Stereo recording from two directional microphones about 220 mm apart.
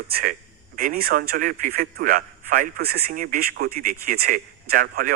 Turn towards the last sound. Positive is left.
turn(degrees=-40)  # may be behind; listen again after turning